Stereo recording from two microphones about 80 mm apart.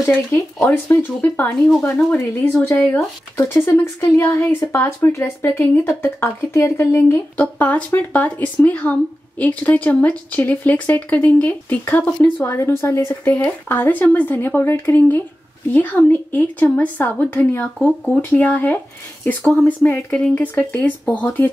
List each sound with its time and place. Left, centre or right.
0.1 s speech: left
0.7 s a woman's voice: left
3.3 s a woman's voice: left
7.3 s speech: centre
12.4 s a woman's voice: left
13.2 s speech: left
20.3 s speech: left